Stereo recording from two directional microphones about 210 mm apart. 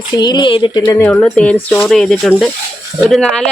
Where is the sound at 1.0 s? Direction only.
10° left (ahead or behind).